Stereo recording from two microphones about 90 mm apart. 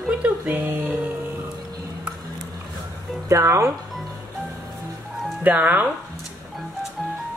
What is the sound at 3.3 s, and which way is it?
Speech, 35° right (ahead or behind).